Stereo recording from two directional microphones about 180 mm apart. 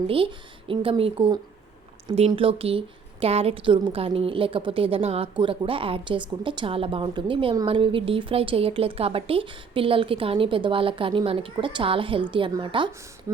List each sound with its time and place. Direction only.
0.7 s a woman's voice: 30° right (ahead or behind)